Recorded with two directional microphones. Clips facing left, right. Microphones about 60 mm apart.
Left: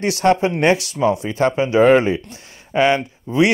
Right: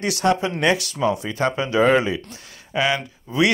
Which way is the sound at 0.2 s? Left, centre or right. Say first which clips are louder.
Left 4 dB; left.